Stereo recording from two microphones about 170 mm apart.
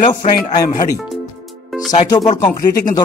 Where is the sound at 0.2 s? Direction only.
40° left (ahead or behind).